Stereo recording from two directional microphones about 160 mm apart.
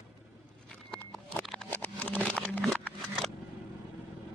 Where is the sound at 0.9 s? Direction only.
10° left (ahead or behind).